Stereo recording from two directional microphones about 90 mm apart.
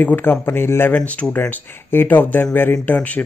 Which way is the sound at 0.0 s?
20° left (ahead or behind).